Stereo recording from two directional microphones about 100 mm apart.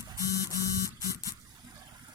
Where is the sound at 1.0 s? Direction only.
35° right (ahead or behind).